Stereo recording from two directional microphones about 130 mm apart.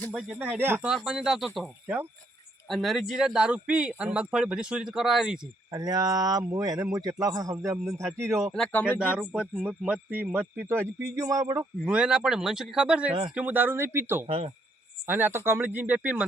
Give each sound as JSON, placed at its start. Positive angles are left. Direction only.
{"t": 0.1, "sound": "speech", "side_deg": 0}
{"t": 0.3, "sound": "speech", "side_deg": -15}
{"t": 0.9, "sound": "speech", "side_deg": -5}
{"t": 5.7, "sound": "a man's voice", "side_deg": -30}
{"t": 8.4, "sound": "speech", "side_deg": 0}
{"t": 8.7, "sound": "speech", "side_deg": 15}
{"t": 9.1, "sound": "a man's voice", "side_deg": -10}
{"t": 11.9, "sound": "speech", "side_deg": -5}
{"t": 14.3, "sound": "speech", "side_deg": -50}
{"t": 15.0, "sound": "speech", "side_deg": -15}